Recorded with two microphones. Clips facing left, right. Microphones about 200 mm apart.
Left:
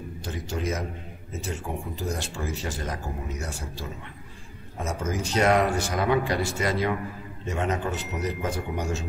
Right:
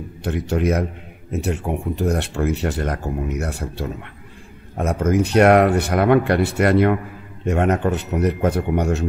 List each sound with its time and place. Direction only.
0.2 s speech: 65° right (ahead or behind)